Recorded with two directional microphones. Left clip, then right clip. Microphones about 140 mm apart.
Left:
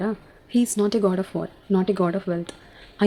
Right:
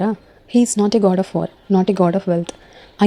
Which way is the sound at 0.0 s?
30° right (ahead or behind).